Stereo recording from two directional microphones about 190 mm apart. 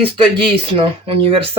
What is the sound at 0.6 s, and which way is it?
Speech, 30° right (ahead or behind).